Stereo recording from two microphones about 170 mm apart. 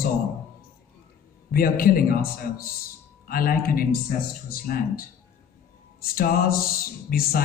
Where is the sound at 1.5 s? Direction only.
60° left (ahead or behind).